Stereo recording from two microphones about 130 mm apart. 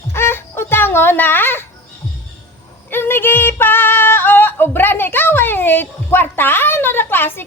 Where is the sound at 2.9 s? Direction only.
15° left (ahead or behind).